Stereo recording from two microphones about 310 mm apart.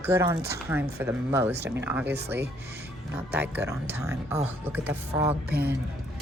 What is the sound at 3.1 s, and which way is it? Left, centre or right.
A woman's voice, centre.